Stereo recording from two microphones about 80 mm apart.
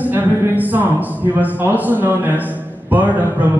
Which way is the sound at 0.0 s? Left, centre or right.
Right.